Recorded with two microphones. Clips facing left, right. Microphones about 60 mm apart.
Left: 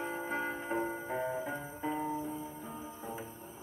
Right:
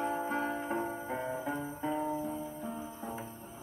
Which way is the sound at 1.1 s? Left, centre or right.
Centre.